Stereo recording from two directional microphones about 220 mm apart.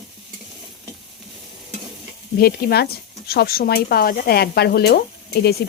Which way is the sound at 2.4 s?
45° left (ahead or behind).